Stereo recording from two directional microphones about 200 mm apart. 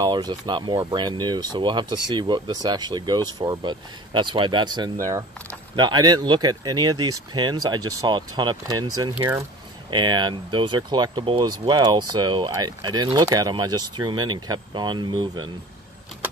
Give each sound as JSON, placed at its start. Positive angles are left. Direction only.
{"t": 0.0, "sound": "speech", "side_deg": -20}
{"t": 9.8, "sound": "speech", "side_deg": -20}